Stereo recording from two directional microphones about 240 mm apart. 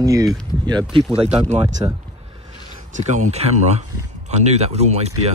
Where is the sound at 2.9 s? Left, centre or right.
Right.